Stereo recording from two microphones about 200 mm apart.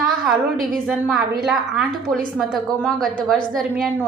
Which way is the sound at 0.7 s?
Centre (ahead or behind).